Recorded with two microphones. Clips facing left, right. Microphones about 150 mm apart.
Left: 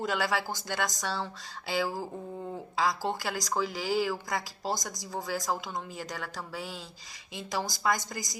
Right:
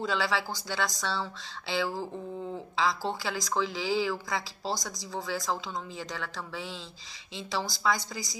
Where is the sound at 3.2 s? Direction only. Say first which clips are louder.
Right 1 dB; 40° left (ahead or behind).